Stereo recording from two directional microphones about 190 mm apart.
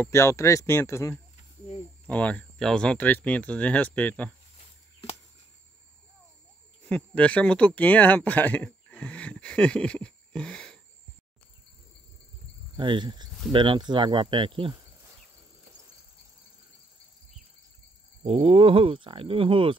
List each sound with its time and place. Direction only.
0.0 s speech: 15° left (ahead or behind)
6.9 s speech: 5° left (ahead or behind)
12.7 s speech: 25° right (ahead or behind)
18.2 s speech: 30° right (ahead or behind)